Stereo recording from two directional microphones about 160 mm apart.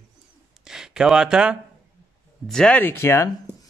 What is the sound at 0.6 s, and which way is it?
Speech, 5° right (ahead or behind).